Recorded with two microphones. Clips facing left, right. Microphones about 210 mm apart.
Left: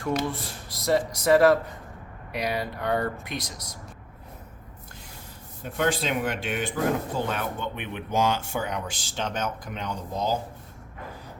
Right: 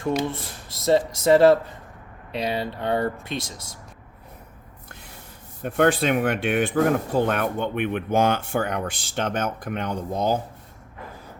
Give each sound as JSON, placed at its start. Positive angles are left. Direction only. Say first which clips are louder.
{"t": 0.2, "sound": "speech", "louder": "right 2 dB", "side_deg": -25}
{"t": 5.6, "sound": "speech", "louder": "right 6 dB", "side_deg": -60}